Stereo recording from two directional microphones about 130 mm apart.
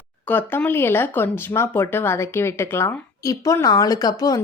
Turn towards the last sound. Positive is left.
turn(degrees=30)  # may be behind; listen again after turning